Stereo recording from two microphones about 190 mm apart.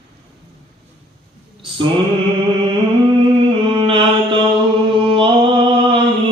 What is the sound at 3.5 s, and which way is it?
Music, 25° right (ahead or behind).